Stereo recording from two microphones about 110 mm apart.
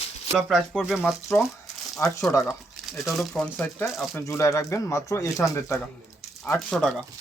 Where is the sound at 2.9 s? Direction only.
Centre (ahead or behind).